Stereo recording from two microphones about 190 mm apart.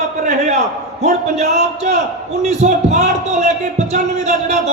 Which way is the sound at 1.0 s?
35° right (ahead or behind).